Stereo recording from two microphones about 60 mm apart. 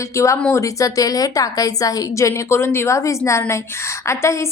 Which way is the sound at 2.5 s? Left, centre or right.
Left.